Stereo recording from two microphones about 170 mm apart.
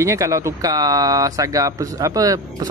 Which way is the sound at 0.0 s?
20° right (ahead or behind).